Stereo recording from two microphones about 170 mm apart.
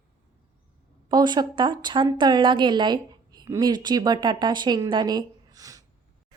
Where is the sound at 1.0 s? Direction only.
25° right (ahead or behind).